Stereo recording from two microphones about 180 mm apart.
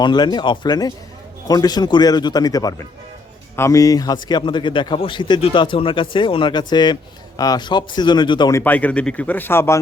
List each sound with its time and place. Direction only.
0.0 s a man's voice: 25° left (ahead or behind)
8.6 s speech: 10° left (ahead or behind)